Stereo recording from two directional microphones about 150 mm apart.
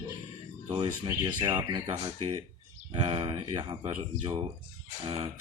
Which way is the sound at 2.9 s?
35° right (ahead or behind).